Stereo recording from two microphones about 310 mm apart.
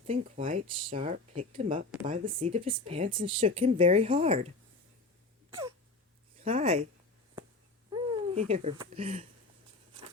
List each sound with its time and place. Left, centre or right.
0.1 s speech: right
5.5 s a sound: centre
6.4 s speech: centre
7.9 s speech: centre